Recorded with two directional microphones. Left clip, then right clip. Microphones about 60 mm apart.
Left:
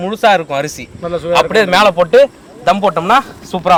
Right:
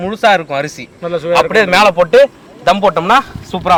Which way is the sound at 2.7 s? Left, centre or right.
Right.